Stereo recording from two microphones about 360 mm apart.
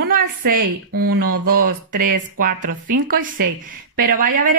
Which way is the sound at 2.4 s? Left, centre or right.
Right.